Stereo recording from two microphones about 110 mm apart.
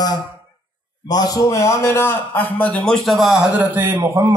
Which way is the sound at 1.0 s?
35° left (ahead or behind).